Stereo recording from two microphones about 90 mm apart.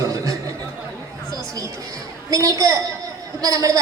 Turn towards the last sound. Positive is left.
turn(degrees=-40)  # may be behind; listen again after turning